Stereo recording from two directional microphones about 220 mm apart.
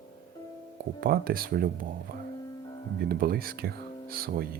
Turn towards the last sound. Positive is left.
turn(degrees=-40)  # may be behind; listen again after turning